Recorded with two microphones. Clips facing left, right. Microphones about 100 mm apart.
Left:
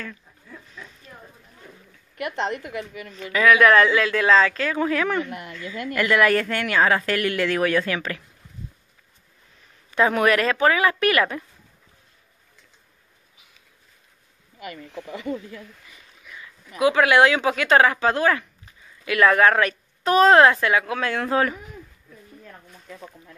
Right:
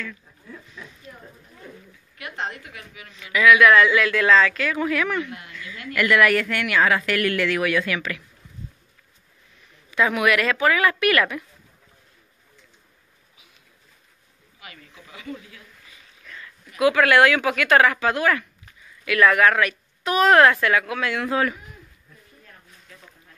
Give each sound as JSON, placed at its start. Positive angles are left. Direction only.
{"t": 3.1, "sound": "speech", "side_deg": 40}
{"t": 9.8, "sound": "speech", "side_deg": 40}
{"t": 14.9, "sound": "speech", "side_deg": 65}
{"t": 16.7, "sound": "speech", "side_deg": 25}